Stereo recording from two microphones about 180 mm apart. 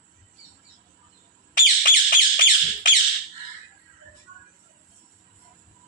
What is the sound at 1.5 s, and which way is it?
Squawk, 50° left (ahead or behind).